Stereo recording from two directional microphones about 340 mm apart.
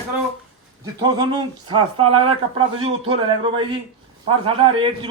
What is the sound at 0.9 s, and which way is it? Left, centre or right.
Speech, centre.